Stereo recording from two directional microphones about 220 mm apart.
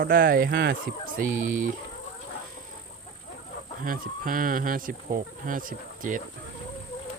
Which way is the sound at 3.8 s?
40° right (ahead or behind).